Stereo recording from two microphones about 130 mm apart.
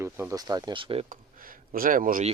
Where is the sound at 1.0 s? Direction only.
90° right.